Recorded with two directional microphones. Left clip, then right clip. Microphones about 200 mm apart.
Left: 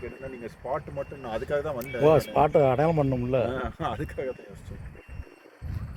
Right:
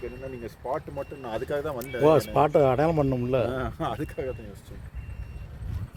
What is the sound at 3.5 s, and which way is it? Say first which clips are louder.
Speech: right 1 dB; 45° right (ahead or behind).